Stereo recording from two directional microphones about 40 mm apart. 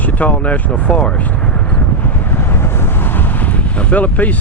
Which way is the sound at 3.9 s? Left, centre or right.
Left.